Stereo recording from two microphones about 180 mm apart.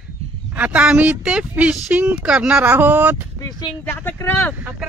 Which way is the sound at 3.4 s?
20° left (ahead or behind).